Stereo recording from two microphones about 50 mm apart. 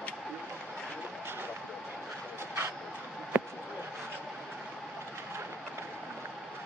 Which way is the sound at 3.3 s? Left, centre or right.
Right.